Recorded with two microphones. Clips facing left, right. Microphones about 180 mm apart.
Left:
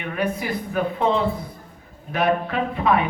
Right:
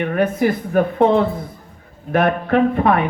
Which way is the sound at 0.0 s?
50° right (ahead or behind).